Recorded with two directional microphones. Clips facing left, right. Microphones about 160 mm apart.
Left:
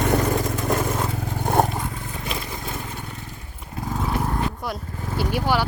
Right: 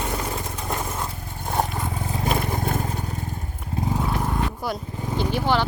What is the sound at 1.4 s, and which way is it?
Vehicle, 55° left (ahead or behind).